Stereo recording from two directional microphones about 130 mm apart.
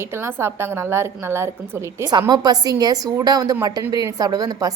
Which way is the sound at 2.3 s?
30° right (ahead or behind).